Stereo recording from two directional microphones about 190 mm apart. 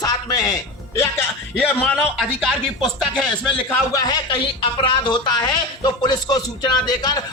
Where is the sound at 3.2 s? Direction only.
5° left (ahead or behind).